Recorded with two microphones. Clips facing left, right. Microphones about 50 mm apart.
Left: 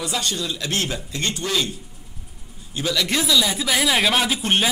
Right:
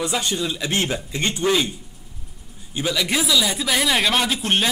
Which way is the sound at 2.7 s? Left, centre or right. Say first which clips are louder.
Even; centre.